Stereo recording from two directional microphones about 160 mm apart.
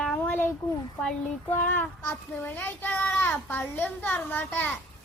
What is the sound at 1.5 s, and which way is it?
A child's voice, 10° left (ahead or behind).